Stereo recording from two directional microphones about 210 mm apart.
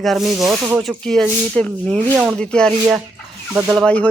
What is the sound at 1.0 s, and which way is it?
Speech, 5° left (ahead or behind).